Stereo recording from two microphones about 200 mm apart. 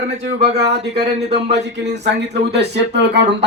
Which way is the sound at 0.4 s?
55° right (ahead or behind).